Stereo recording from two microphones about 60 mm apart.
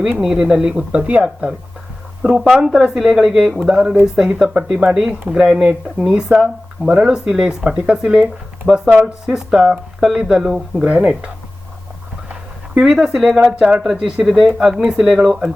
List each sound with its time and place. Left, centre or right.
0.2 s speech: centre
2.2 s speech: centre
8.9 s speech: right
9.2 s speech: centre
12.7 s speech: centre